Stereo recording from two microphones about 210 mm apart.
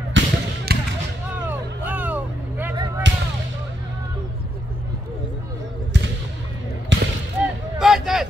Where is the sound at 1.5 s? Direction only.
10° right (ahead or behind).